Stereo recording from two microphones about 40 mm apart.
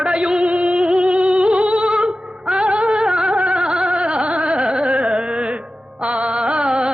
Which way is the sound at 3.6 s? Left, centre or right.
Right.